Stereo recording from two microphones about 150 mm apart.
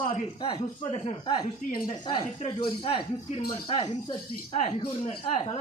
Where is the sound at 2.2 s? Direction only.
35° left (ahead or behind).